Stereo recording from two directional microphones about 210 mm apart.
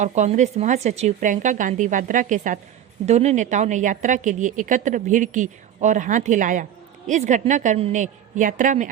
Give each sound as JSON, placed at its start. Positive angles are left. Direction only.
{"t": 0.0, "sound": "a woman's voice", "side_deg": -30}